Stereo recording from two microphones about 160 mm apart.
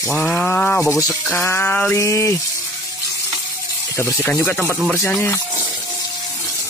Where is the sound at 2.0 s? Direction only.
20° left (ahead or behind).